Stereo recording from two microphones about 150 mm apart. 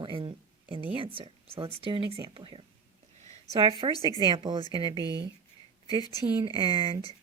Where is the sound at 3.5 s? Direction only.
35° right (ahead or behind).